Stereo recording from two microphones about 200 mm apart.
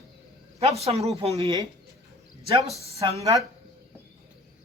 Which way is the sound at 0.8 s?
30° right (ahead or behind).